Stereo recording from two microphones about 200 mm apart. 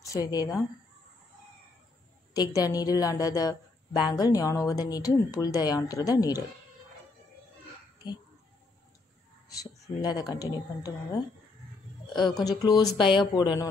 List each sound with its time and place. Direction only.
0.0 s speech: 15° left (ahead or behind)
2.3 s speech: 20° left (ahead or behind)
9.5 s speech: 20° left (ahead or behind)
12.1 s speech: 20° left (ahead or behind)